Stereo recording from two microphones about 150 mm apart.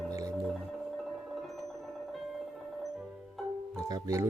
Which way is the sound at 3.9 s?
20° right (ahead or behind).